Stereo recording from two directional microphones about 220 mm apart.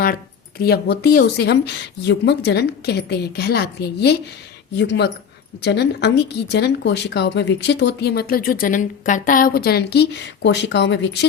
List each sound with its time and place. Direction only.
0.6 s speech: 45° left (ahead or behind)